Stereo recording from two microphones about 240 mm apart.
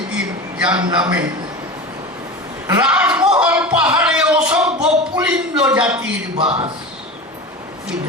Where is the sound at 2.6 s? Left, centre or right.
Centre.